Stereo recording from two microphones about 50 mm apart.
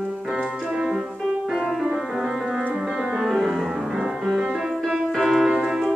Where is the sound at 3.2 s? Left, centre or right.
Centre.